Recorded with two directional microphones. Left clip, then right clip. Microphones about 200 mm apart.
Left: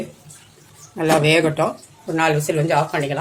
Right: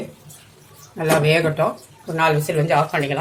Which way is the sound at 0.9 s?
25° left (ahead or behind).